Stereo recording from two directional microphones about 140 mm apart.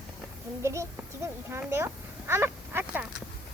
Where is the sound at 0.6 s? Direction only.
20° right (ahead or behind).